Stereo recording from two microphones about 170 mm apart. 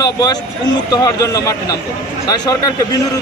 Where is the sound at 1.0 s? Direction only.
20° left (ahead or behind).